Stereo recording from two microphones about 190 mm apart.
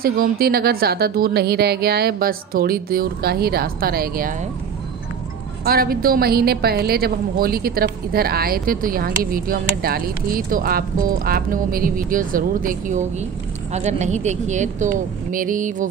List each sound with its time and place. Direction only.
0.0 s a woman's voice: 50° right (ahead or behind)
5.6 s a woman's voice: 50° right (ahead or behind)